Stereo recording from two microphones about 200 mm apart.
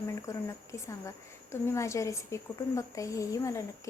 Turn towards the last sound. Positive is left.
turn(degrees=15)  # may be behind; listen again after turning